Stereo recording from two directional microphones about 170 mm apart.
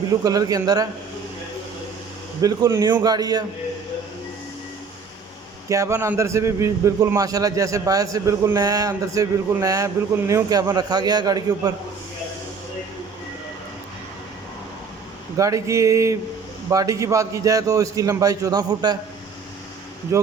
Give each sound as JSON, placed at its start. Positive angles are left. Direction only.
{"t": 0.1, "sound": "a man's voice", "side_deg": -20}
{"t": 2.4, "sound": "a man's voice", "side_deg": -20}
{"t": 5.6, "sound": "a man's voice", "side_deg": -20}
{"t": 15.4, "sound": "a sound", "side_deg": -20}
{"t": 16.6, "sound": "a man's voice", "side_deg": -20}